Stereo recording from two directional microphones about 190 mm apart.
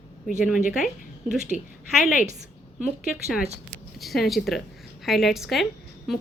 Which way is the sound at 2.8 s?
5° right (ahead or behind).